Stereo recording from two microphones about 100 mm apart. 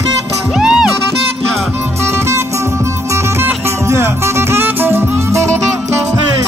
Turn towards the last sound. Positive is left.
turn(degrees=-30)  # may be behind; listen again after turning